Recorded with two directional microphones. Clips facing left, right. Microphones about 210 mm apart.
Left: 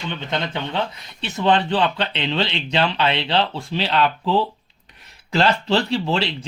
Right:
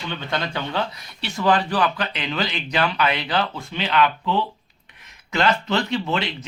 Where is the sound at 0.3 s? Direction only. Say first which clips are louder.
Left 1 dB; 20° left (ahead or behind).